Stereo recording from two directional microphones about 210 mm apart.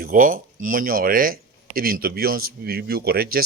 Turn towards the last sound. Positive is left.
turn(degrees=-45)  # may be behind; listen again after turning